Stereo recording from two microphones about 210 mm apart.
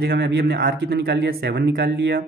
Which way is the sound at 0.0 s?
50° right (ahead or behind).